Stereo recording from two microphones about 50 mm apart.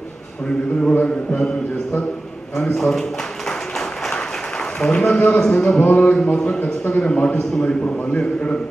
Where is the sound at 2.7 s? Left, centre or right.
Centre.